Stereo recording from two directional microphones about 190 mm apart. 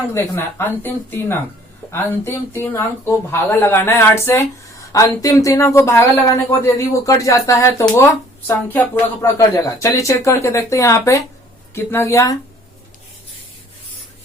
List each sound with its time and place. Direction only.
0.1 s speech: 15° left (ahead or behind)